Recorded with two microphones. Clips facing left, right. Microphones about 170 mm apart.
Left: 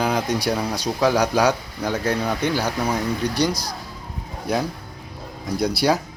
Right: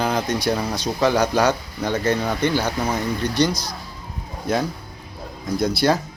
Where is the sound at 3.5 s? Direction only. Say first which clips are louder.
Left 1 dB; 35° left (ahead or behind).